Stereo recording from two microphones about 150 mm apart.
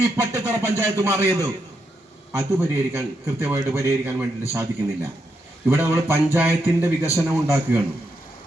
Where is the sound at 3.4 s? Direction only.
15° right (ahead or behind).